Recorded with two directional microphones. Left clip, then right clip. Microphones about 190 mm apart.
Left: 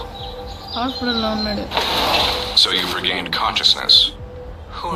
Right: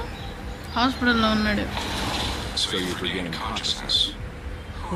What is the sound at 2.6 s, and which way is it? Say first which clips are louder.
Speech: left 8 dB; 45° left (ahead or behind).